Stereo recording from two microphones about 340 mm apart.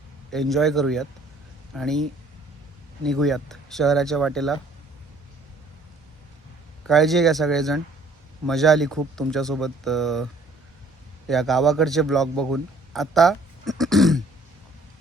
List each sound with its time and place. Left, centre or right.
0.3 s speech: centre
6.8 s speech: centre
11.3 s a man's voice: centre